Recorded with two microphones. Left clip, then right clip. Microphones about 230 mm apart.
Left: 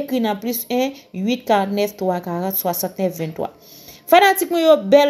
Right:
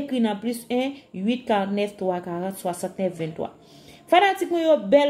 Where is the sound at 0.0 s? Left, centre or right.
Centre.